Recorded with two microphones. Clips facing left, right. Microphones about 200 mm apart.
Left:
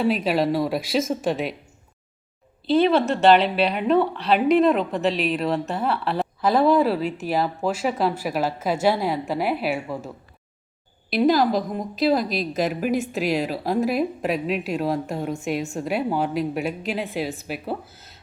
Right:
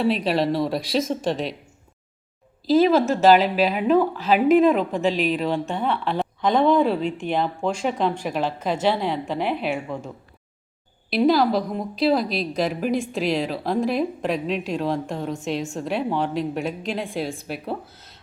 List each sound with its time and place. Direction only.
0.0 s a woman's voice: centre (ahead or behind)
2.6 s a woman's voice: centre (ahead or behind)
11.1 s a woman's voice: centre (ahead or behind)
17.9 s a sound: 5° left (ahead or behind)